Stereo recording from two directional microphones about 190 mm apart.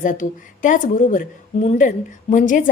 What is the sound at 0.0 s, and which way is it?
A woman's voice, 40° left (ahead or behind).